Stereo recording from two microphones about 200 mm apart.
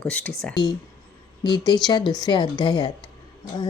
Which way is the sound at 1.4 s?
20° left (ahead or behind).